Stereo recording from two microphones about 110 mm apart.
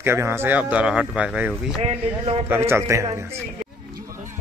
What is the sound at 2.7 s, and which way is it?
Speech, 25° right (ahead or behind).